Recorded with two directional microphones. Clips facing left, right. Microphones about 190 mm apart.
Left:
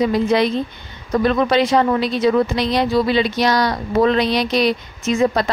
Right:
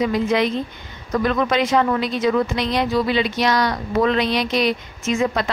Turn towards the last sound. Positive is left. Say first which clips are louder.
# left 3 dB
turn(degrees=35)  # may be behind; listen again after turning